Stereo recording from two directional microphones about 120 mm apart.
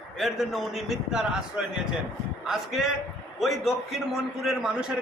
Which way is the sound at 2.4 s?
5° right (ahead or behind).